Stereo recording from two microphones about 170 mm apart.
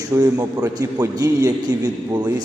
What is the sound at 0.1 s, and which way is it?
A man's voice, 20° right (ahead or behind).